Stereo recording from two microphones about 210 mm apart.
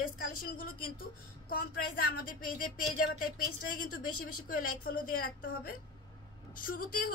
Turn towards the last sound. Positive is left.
turn(degrees=40)  # may be behind; listen again after turning